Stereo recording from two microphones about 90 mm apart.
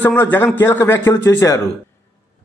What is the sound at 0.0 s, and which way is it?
A man's voice, 20° left (ahead or behind).